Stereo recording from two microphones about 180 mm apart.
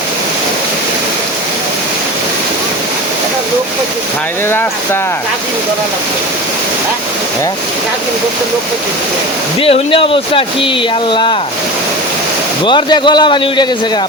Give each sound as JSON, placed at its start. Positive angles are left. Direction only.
{"t": 9.6, "sound": "a man's voice", "side_deg": 30}
{"t": 12.6, "sound": "a man's voice", "side_deg": 25}